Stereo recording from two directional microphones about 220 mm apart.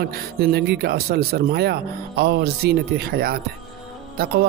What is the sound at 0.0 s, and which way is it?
Speech, 45° right (ahead or behind).